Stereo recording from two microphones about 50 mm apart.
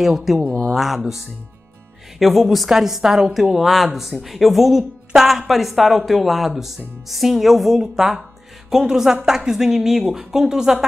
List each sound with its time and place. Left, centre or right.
0.0 s speech: centre